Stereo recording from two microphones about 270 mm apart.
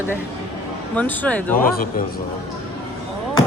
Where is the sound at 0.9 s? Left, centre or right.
Centre.